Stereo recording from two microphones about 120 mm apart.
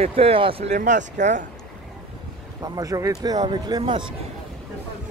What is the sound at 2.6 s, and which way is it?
Speech, 30° right (ahead or behind).